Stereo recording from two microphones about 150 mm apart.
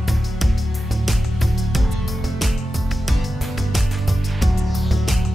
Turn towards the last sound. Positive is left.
turn(degrees=0)  # may be behind; listen again after turning